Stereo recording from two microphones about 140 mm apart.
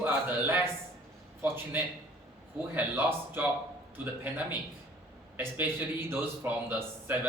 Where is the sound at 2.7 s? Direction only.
15° right (ahead or behind).